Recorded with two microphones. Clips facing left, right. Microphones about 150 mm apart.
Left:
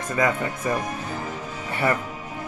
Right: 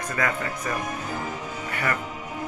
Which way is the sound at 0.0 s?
20° left (ahead or behind).